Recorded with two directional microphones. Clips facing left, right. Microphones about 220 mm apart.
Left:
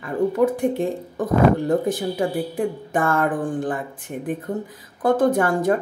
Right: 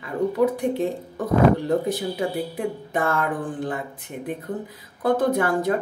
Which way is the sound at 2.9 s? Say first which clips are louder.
Left 3 dB; 50° left (ahead or behind).